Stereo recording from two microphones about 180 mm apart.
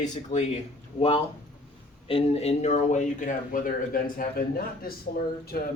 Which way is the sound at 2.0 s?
35° left (ahead or behind).